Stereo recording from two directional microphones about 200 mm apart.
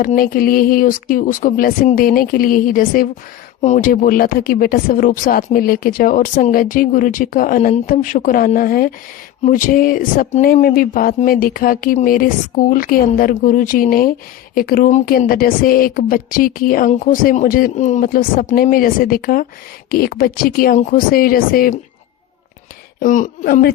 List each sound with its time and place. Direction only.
0.0 s speech: 45° left (ahead or behind)
23.0 s speech: 40° left (ahead or behind)